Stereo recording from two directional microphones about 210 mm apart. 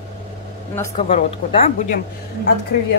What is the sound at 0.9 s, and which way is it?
Speech, 30° left (ahead or behind).